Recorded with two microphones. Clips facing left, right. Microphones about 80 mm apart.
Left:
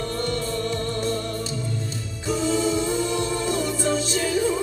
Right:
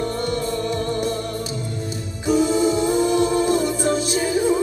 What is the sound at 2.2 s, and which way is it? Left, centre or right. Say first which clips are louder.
Music: right 5 dB; centre.